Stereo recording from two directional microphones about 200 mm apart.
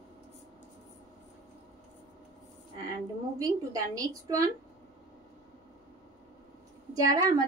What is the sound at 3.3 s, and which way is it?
A woman's voice, 15° right (ahead or behind).